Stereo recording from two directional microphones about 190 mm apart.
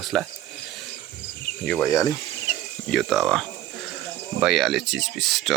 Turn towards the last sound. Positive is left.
turn(degrees=0)  # may be behind; listen again after turning